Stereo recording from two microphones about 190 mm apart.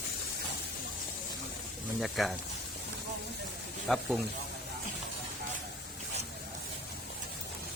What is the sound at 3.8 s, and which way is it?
Speech, centre (ahead or behind).